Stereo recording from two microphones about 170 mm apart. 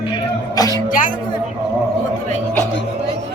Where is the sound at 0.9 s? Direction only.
50° left (ahead or behind).